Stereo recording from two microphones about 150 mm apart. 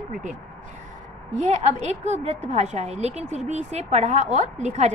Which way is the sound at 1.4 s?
50° right (ahead or behind).